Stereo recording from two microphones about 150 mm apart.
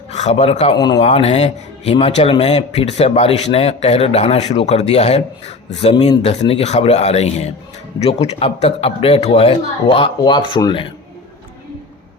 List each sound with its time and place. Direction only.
0.1 s speech: 50° left (ahead or behind)
0.7 s speech: 30° left (ahead or behind)
1.0 s a man's voice: 45° left (ahead or behind)